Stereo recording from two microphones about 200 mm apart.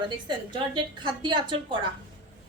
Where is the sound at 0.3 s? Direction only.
25° right (ahead or behind).